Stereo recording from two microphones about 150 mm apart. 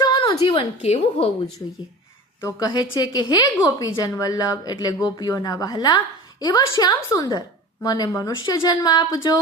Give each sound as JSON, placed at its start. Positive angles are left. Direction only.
{"t": 0.0, "sound": "a woman's voice", "side_deg": 25}
{"t": 2.4, "sound": "a woman's voice", "side_deg": 25}